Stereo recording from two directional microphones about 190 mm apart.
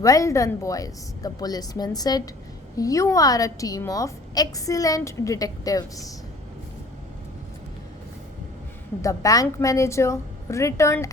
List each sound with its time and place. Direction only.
0.0 s a woman's voice: 15° left (ahead or behind)
9.0 s a woman's voice: 15° left (ahead or behind)